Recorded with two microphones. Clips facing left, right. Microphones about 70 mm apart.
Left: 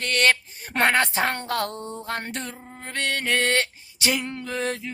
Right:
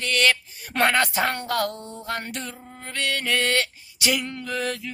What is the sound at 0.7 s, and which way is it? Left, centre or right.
Speech, left.